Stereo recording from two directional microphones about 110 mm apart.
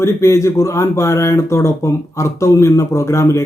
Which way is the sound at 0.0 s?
25° left (ahead or behind).